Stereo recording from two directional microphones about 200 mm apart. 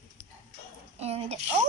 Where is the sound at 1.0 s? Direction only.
30° right (ahead or behind).